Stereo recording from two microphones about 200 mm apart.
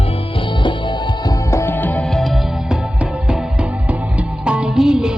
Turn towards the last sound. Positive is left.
turn(degrees=-5)  # may be behind; listen again after turning